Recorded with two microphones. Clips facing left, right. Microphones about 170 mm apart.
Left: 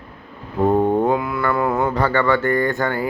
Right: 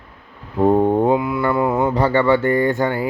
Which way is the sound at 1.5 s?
10° right (ahead or behind).